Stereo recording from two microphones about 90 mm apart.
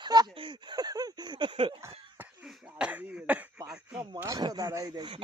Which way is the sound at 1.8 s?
30° right (ahead or behind).